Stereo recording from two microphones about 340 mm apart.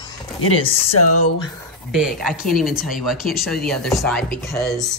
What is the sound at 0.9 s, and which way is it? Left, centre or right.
Speech, left.